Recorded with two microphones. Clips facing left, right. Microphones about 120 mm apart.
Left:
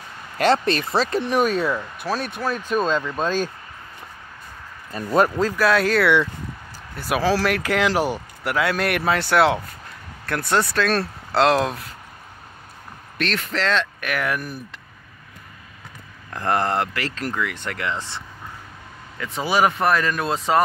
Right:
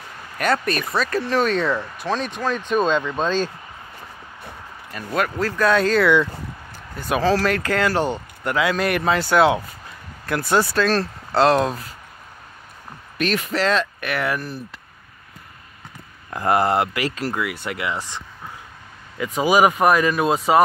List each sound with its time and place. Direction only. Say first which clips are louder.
0.4 s speech: left 3 dB; 30° left (ahead or behind); by 3.5 s 10° left (ahead or behind)
4.9 s speech: left 5 dB; 35° left (ahead or behind)
5.6 s speech: right 2 dB; 5° left (ahead or behind)
13.2 s speech: right 3 dB; 10° right (ahead or behind)
16.3 s speech: right 3 dB; 10° right (ahead or behind)